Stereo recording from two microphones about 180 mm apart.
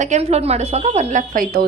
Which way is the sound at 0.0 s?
40° right (ahead or behind).